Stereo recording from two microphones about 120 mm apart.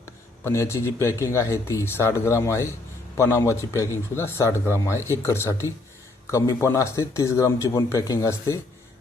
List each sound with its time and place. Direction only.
0.4 s speech: 25° left (ahead or behind)